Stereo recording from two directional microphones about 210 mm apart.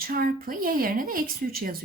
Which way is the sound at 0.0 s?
45° right (ahead or behind).